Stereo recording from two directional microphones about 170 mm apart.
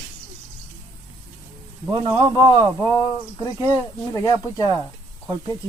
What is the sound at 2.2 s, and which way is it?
Speech, 25° right (ahead or behind).